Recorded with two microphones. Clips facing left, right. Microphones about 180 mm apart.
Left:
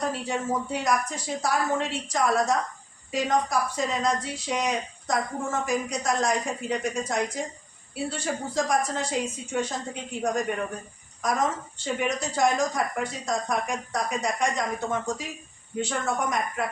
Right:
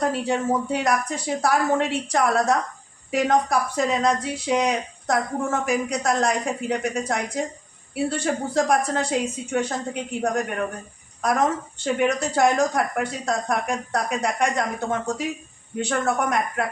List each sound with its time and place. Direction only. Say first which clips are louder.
0.7 s speech: right 3 dB; 65° right (ahead or behind)